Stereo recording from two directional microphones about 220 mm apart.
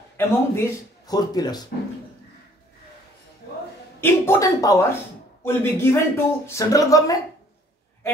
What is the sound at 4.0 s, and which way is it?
Speech, 15° left (ahead or behind).